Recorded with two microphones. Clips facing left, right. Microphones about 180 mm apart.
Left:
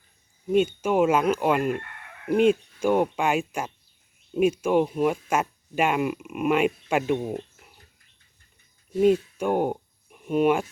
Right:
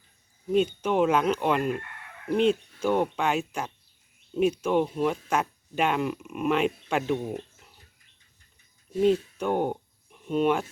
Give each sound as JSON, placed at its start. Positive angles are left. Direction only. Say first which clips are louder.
{"t": 0.5, "sound": "speech", "louder": "left 2 dB", "side_deg": 5}
{"t": 9.0, "sound": "speech", "louder": "left 3 dB", "side_deg": 10}